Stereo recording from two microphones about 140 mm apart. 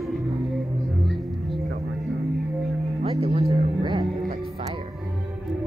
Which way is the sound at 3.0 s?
45° right (ahead or behind).